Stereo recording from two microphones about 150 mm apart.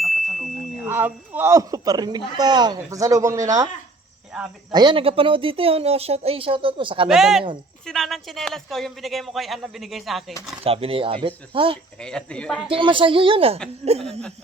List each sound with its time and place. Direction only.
0.0 s a sound: centre (ahead or behind)
0.9 s speech: 10° right (ahead or behind)
4.3 s speech: 5° right (ahead or behind)
4.7 s a woman's voice: 30° right (ahead or behind)
7.1 s speech: 5° right (ahead or behind)
10.6 s a woman's voice: 40° right (ahead or behind)
11.9 s speech: 5° left (ahead or behind)
12.6 s a woman's voice: 35° right (ahead or behind)